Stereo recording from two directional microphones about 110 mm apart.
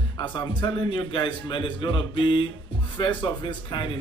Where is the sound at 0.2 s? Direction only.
45° left (ahead or behind).